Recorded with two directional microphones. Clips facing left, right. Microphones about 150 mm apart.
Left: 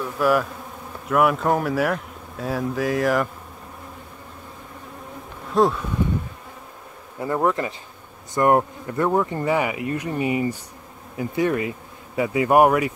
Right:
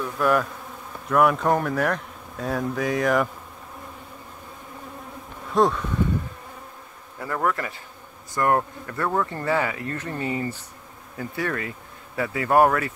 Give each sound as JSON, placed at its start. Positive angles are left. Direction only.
{"t": 0.0, "sound": "speech", "side_deg": 5}
{"t": 5.5, "sound": "speech", "side_deg": 0}
{"t": 7.2, "sound": "speech", "side_deg": 20}